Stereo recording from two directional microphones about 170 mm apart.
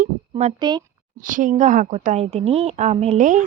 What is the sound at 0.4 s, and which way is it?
A woman's voice, 40° right (ahead or behind).